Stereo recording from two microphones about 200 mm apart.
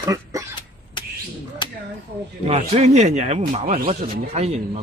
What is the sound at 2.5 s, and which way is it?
Speech, 35° right (ahead or behind).